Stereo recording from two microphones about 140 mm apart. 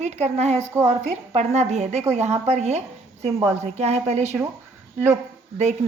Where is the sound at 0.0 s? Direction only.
55° right (ahead or behind).